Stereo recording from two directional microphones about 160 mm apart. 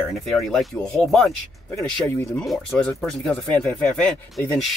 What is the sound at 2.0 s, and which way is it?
Speech, 15° left (ahead or behind).